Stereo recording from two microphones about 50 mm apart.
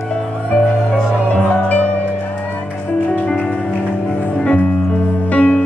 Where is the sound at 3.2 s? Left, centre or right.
Centre.